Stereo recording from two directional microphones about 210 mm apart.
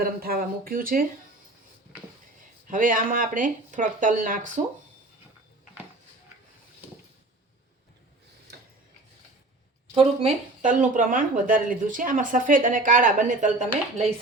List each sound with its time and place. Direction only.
0.0 s speech: 45° right (ahead or behind)
2.6 s speech: 40° right (ahead or behind)
9.9 s speech: 25° right (ahead or behind)